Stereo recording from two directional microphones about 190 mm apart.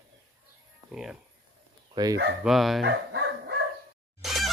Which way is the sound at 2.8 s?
65° right (ahead or behind).